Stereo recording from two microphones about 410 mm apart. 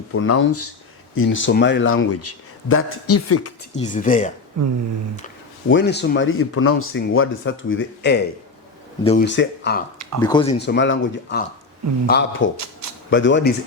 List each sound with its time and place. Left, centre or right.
0.1 s speech: left
3.8 s speech: centre
4.6 s a sound: right
5.6 s speech: left
10.2 s speech: centre
10.6 s speech: left